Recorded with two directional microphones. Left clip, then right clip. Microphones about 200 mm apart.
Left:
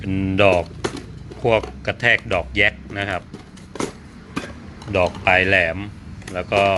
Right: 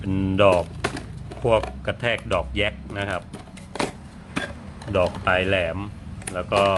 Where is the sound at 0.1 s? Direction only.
10° right (ahead or behind).